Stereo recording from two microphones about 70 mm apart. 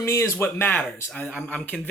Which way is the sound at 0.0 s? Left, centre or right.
Left.